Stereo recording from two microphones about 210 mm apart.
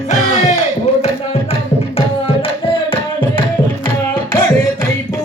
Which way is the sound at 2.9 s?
20° left (ahead or behind).